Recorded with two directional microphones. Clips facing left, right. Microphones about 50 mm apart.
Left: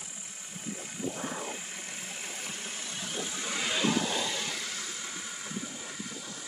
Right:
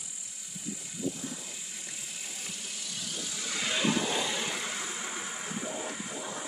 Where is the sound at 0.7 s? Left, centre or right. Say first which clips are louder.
Right 1 dB; left.